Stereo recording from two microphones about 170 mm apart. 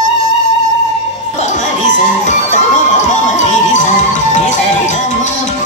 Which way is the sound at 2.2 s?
45° left (ahead or behind).